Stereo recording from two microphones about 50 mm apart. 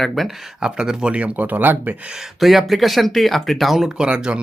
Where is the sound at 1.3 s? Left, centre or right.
Right.